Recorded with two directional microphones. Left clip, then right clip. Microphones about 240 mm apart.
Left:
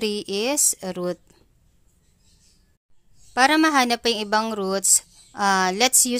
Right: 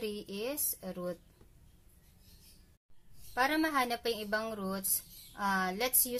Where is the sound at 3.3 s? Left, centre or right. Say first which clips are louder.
Left 13 dB; left.